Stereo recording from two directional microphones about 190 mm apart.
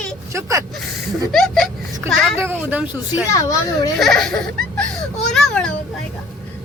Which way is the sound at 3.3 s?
15° left (ahead or behind).